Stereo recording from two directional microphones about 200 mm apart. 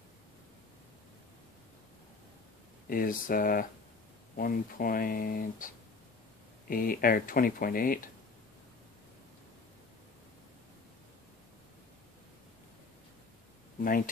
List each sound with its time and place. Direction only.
2.9 s speech: 45° left (ahead or behind)
6.7 s speech: 45° left (ahead or behind)